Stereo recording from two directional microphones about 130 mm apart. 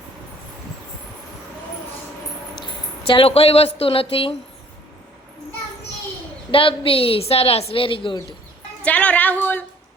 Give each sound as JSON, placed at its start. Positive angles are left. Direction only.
{"t": 3.1, "sound": "a woman's voice", "side_deg": 45}
{"t": 6.5, "sound": "a woman's voice", "side_deg": 45}
{"t": 8.8, "sound": "speech", "side_deg": 10}